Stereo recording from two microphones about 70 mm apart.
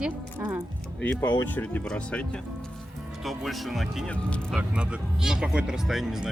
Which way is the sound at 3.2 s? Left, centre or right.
Centre.